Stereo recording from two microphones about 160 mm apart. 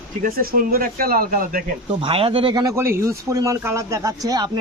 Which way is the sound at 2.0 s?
35° right (ahead or behind).